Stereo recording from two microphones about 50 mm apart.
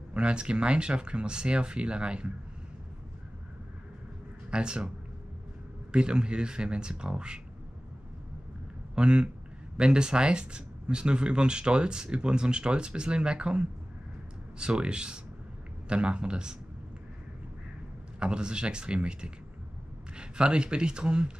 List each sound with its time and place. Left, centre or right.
0.1 s speech: right
4.5 s speech: centre
8.9 s speech: right
18.2 s speech: centre